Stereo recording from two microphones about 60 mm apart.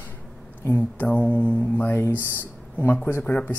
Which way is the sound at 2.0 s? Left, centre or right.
Left.